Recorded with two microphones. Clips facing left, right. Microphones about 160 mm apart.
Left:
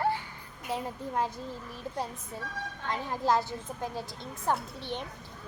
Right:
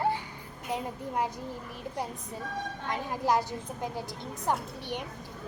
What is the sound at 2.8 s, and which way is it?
Speech, 20° right (ahead or behind).